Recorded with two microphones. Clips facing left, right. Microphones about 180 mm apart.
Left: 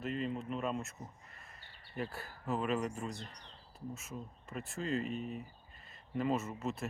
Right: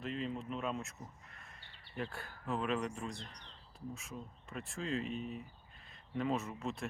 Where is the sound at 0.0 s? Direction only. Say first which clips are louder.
Left 2 dB; centre (ahead or behind).